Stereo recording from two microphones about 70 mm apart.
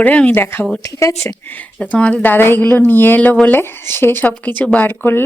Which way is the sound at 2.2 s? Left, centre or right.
Left.